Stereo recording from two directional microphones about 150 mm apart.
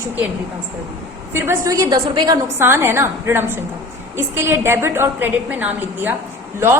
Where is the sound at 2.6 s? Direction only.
15° right (ahead or behind).